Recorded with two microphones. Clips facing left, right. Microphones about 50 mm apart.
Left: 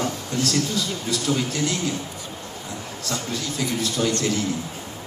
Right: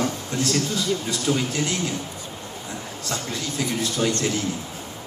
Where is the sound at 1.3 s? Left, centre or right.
Right.